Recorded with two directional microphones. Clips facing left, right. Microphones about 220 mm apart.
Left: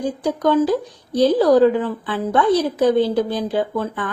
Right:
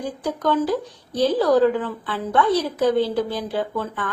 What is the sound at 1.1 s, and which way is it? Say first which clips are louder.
A woman's voice: left 4 dB; 15° left (ahead or behind).